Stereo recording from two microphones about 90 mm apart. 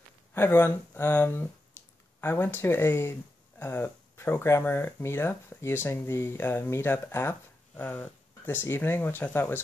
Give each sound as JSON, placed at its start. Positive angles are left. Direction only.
{"t": 0.3, "sound": "speech", "side_deg": 25}